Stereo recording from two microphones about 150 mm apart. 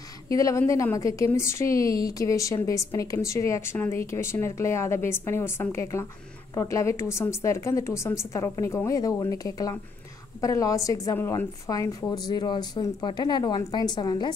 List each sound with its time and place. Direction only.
0.3 s a woman's voice: 20° left (ahead or behind)